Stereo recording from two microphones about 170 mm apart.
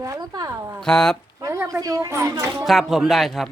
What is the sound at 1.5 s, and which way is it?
Speech, 15° right (ahead or behind).